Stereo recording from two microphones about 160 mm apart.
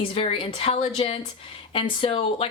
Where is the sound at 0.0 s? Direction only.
35° left (ahead or behind).